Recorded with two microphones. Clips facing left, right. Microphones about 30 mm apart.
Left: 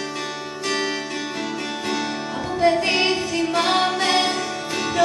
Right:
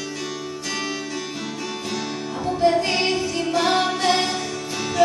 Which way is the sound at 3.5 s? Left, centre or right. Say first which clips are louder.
Even; left.